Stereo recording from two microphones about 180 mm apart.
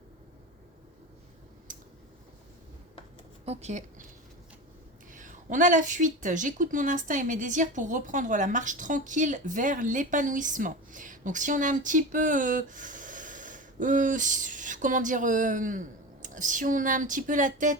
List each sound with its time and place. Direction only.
1.7 s a sound: 50° right (ahead or behind)
3.4 s speech: 35° right (ahead or behind)
5.1 s a woman's voice: 45° right (ahead or behind)